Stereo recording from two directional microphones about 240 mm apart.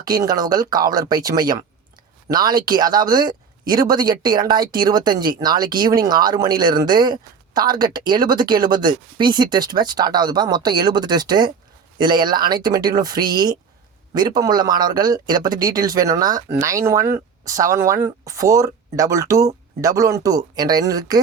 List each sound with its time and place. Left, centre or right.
0.0 s speech: centre